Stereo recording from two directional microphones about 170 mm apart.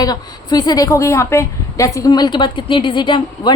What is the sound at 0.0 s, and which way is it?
A woman's voice, 25° left (ahead or behind).